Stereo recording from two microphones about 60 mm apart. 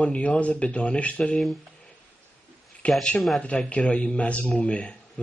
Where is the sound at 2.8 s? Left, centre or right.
Left.